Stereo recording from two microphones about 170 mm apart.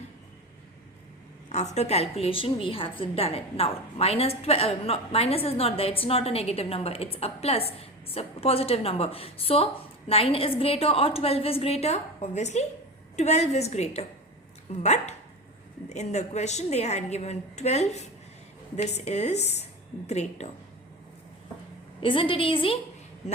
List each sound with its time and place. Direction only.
1.5 s a woman's voice: 40° left (ahead or behind)
22.0 s a woman's voice: 30° left (ahead or behind)